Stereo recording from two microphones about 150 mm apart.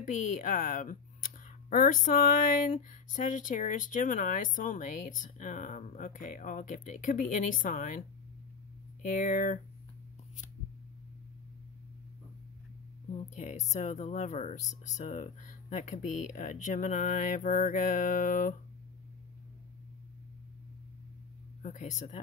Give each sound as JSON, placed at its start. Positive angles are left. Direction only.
{"t": 0.0, "sound": "speech", "side_deg": 55}
{"t": 9.0, "sound": "speech", "side_deg": 60}
{"t": 13.3, "sound": "speech", "side_deg": 50}
{"t": 21.6, "sound": "speech", "side_deg": 55}